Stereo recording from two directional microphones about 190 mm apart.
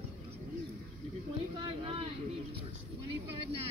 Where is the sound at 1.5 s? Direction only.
30° right (ahead or behind).